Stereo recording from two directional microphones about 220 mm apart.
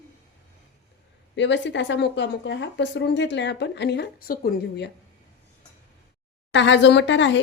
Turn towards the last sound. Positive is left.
turn(degrees=55)  # may be behind; listen again after turning